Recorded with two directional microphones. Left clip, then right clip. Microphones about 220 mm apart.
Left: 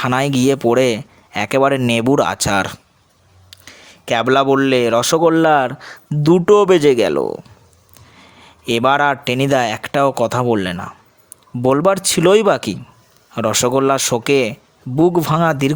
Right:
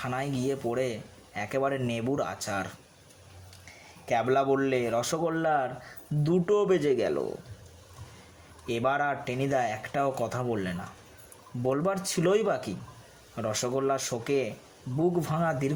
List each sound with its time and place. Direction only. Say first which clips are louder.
0.0 s speech: left 16 dB; 50° left (ahead or behind)
8.6 s speech: left 13 dB; 40° left (ahead or behind)